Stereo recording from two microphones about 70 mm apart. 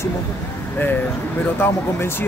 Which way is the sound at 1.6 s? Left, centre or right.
Left.